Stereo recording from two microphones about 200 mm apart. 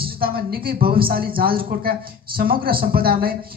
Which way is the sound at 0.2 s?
50° right (ahead or behind).